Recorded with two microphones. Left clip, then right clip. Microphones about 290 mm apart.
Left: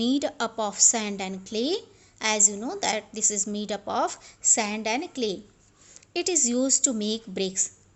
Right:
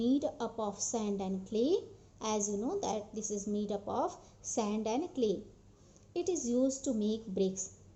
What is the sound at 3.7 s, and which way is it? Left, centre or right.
Speech, left.